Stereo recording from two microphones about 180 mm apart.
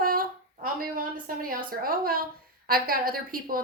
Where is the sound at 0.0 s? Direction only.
55° right (ahead or behind).